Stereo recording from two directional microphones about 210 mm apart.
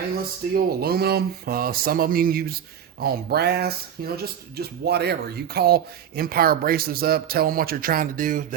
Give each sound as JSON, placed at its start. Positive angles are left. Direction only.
{"t": 0.5, "sound": "speech", "side_deg": -50}